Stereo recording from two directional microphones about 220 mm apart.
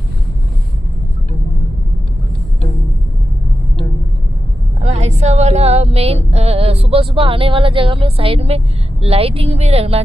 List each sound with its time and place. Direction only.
4.8 s music: 30° right (ahead or behind)